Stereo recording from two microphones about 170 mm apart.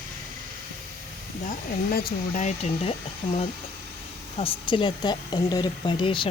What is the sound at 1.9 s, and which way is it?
Speech, 60° left (ahead or behind).